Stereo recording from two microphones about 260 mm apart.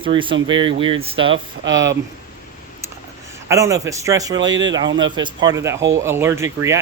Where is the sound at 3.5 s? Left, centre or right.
Centre.